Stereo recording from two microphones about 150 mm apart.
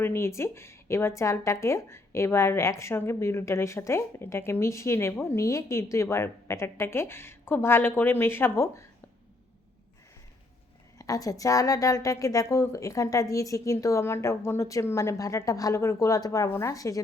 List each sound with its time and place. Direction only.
0.0 s speech: 15° left (ahead or behind)
10.9 s a woman's voice: 25° left (ahead or behind)